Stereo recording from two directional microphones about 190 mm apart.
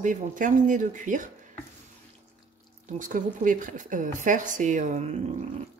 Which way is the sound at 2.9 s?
45° right (ahead or behind).